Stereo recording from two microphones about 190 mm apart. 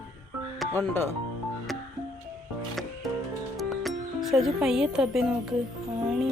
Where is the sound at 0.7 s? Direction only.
10° left (ahead or behind).